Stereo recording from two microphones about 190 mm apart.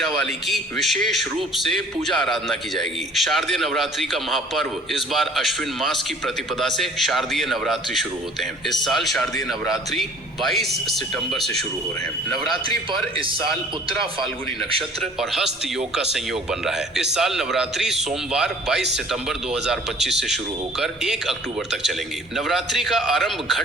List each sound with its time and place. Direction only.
0.0 s a man's voice: centre (ahead or behind)
12.6 s a man's voice: 25° right (ahead or behind)
15.2 s a man's voice: centre (ahead or behind)